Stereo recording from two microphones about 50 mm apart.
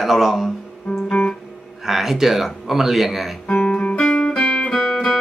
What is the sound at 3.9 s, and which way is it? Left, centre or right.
Music, centre.